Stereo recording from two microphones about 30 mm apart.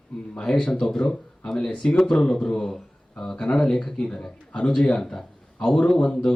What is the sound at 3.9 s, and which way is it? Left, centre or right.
Speech, left.